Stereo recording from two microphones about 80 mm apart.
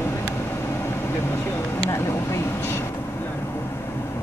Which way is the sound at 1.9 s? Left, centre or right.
Left.